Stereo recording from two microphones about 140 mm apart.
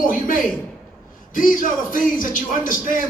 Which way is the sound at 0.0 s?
75° left (ahead or behind).